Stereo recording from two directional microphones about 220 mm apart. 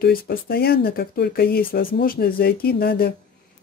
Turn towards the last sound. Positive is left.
turn(degrees=45)  # may be behind; listen again after turning